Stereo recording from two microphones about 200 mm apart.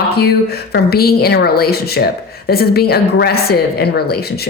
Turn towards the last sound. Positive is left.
turn(degrees=50)  # may be behind; listen again after turning